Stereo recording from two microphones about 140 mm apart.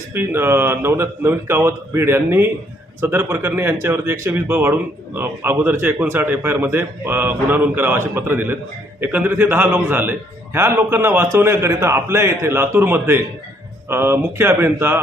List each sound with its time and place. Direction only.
0.1 s speech: 15° right (ahead or behind)